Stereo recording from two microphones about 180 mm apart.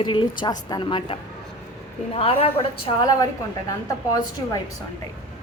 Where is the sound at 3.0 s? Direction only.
20° left (ahead or behind).